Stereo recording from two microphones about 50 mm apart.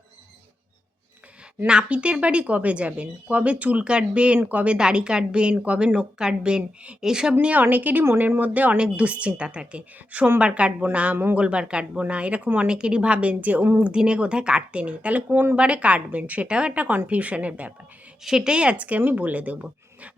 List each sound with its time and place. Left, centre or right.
1.6 s a woman's voice: right
7.5 s speech: right
10.4 s speech: right
13.8 s speech: centre
18.2 s speech: centre; by 19.5 s right